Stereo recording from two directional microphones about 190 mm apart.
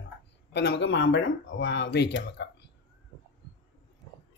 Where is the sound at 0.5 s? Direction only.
65° left (ahead or behind).